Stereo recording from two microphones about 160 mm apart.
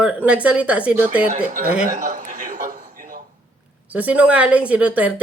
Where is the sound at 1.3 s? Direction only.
50° right (ahead or behind).